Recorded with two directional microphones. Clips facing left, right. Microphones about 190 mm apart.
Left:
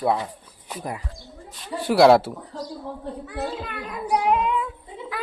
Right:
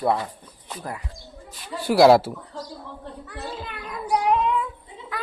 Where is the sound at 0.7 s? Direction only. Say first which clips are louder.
Left 2 dB; 20° left (ahead or behind).